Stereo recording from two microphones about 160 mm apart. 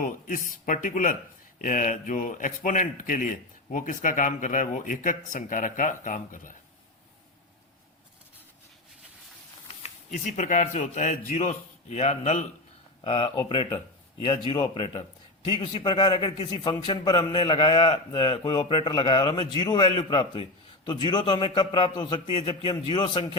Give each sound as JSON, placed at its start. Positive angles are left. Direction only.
{"t": 0.0, "sound": "speech", "side_deg": 55}
{"t": 9.8, "sound": "a man's voice", "side_deg": 50}
{"t": 13.1, "sound": "a man's voice", "side_deg": 35}